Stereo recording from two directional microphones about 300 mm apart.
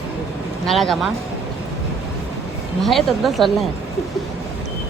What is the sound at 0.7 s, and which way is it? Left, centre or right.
Speech, centre.